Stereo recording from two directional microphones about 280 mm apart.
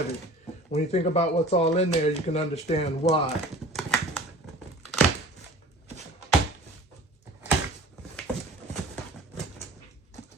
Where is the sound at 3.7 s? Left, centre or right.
Centre.